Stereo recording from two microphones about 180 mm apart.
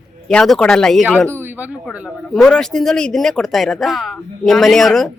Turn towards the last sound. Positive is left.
turn(degrees=0)  # may be behind; listen again after turning